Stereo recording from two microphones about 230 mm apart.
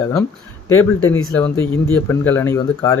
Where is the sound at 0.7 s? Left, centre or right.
Left.